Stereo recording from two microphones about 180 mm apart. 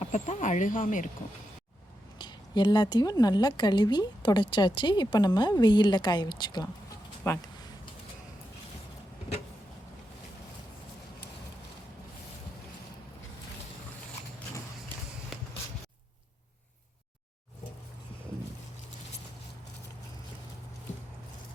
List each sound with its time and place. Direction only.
0.0 s speech: 40° left (ahead or behind)
2.1 s a woman's voice: 25° left (ahead or behind)